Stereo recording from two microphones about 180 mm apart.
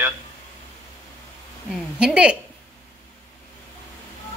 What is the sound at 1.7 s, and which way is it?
Speech, 5° right (ahead or behind).